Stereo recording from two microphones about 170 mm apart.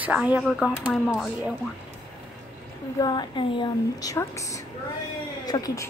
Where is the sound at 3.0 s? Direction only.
25° left (ahead or behind).